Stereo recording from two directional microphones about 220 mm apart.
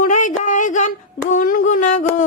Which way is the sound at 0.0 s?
35° left (ahead or behind).